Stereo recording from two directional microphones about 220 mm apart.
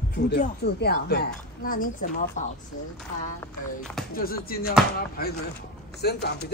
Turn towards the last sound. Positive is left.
turn(degrees=50)  # may be behind; listen again after turning